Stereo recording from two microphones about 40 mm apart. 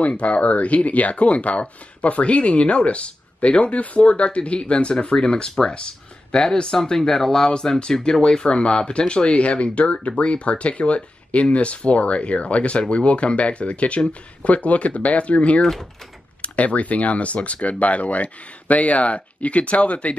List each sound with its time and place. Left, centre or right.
0.0 s speech: left